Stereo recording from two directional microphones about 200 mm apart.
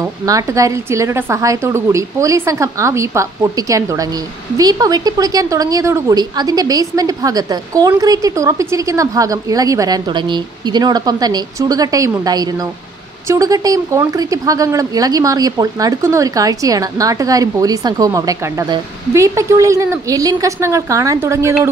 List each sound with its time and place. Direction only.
0.0 s speech: 15° right (ahead or behind)